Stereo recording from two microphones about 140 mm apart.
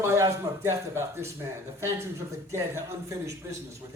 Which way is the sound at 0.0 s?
20° right (ahead or behind).